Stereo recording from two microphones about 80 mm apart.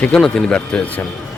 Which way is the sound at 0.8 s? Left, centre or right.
Left.